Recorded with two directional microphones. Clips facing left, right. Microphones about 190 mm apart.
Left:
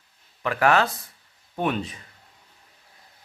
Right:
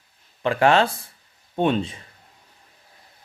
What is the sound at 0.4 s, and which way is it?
Speech, 25° right (ahead or behind).